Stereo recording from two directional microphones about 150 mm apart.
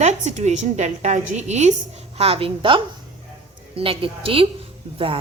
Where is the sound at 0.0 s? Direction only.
50° right (ahead or behind).